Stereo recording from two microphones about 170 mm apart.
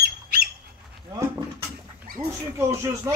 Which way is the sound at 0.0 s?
65° right (ahead or behind).